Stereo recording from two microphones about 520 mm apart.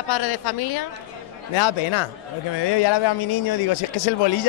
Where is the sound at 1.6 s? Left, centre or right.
Left.